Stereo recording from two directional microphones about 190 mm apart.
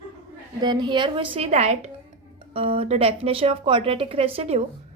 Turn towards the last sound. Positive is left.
turn(degrees=-30)  # may be behind; listen again after turning